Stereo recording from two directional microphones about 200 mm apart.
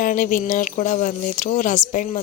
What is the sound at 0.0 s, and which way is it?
Speech, 45° left (ahead or behind).